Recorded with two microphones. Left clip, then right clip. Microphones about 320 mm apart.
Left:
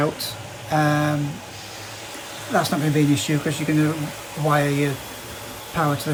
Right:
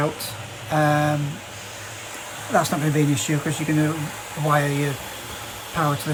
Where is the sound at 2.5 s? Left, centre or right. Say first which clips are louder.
Even; centre.